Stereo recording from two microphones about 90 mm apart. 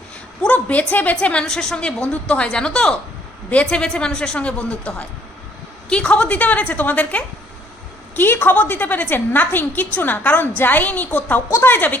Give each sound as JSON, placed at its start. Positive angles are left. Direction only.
{"t": 0.4, "sound": "a woman's voice", "side_deg": 15}